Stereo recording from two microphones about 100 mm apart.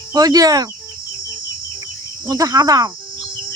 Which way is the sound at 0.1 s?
40° right (ahead or behind).